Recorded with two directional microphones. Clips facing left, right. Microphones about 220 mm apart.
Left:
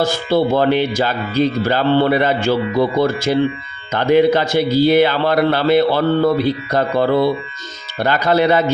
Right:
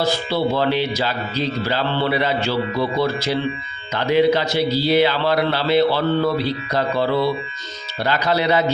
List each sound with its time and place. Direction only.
0.0 s speech: 50° left (ahead or behind)